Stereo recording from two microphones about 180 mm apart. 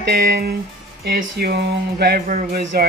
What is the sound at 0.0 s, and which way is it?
Speech, 60° right (ahead or behind).